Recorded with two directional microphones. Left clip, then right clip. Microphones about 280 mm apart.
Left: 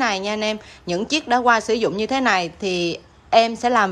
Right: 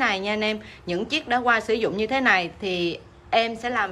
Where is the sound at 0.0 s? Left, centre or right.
Centre.